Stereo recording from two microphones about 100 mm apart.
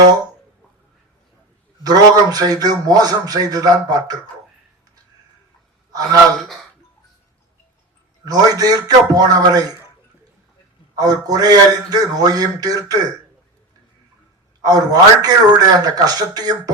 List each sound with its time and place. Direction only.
1.8 s a man's voice: 40° right (ahead or behind)
5.9 s speech: 40° right (ahead or behind)
8.2 s a man's voice: 40° right (ahead or behind)
10.9 s a man's voice: 40° right (ahead or behind)
14.6 s a man's voice: 40° right (ahead or behind)